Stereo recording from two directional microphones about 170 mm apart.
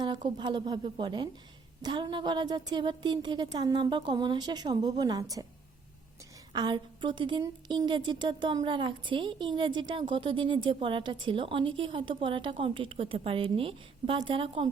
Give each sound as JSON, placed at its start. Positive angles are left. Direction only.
{"t": 0.0, "sound": "a woman's voice", "side_deg": -25}
{"t": 6.5, "sound": "a woman's voice", "side_deg": -25}